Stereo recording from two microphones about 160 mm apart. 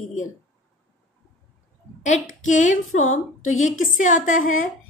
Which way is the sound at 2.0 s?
50° left (ahead or behind).